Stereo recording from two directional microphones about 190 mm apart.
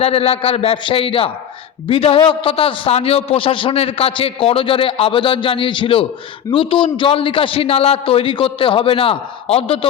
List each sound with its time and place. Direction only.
0.0 s a man's voice: 30° left (ahead or behind)